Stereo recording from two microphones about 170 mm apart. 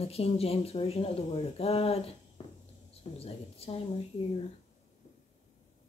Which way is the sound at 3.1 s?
35° left (ahead or behind).